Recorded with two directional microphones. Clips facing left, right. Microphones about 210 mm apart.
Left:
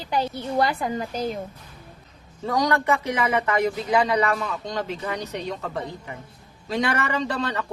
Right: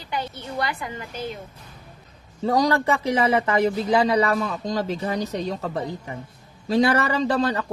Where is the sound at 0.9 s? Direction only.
40° left (ahead or behind).